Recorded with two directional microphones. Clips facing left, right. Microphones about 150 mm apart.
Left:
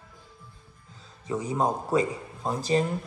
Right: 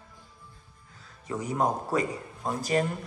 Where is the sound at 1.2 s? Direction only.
20° left (ahead or behind).